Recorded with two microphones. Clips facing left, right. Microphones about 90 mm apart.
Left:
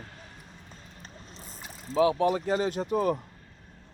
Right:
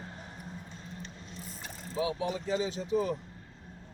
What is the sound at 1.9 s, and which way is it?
Speech, 70° left (ahead or behind).